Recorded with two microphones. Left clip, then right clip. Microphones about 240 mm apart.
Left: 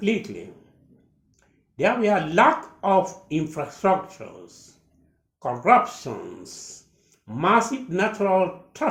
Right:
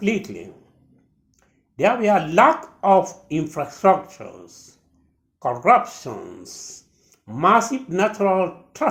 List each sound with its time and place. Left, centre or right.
0.0 s speech: right
1.7 s speech: right
5.6 s speech: right